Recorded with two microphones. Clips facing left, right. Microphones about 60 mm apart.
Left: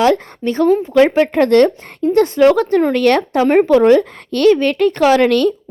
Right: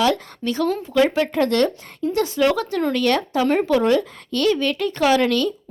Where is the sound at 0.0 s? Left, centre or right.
Left.